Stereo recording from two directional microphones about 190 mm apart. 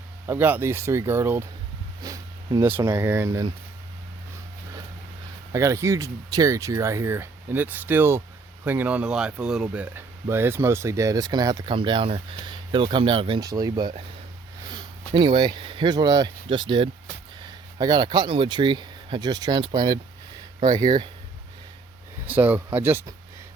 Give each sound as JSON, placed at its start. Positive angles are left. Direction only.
{"t": 0.3, "sound": "speech", "side_deg": -10}
{"t": 5.5, "sound": "speech", "side_deg": -15}
{"t": 22.3, "sound": "speech", "side_deg": -10}